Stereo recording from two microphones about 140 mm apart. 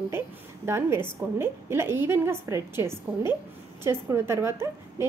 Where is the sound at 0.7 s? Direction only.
20° right (ahead or behind).